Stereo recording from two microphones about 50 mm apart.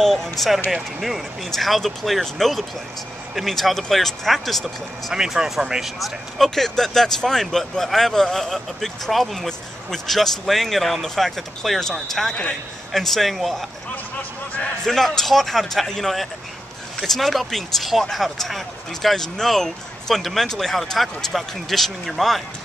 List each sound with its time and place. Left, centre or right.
0.0 s speech: centre
5.1 s speech: centre
5.9 s speech: centre
14.9 s speech: centre